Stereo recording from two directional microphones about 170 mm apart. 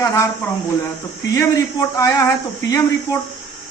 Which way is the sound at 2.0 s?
20° left (ahead or behind).